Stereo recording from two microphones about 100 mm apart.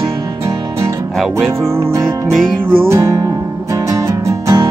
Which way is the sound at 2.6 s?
20° right (ahead or behind).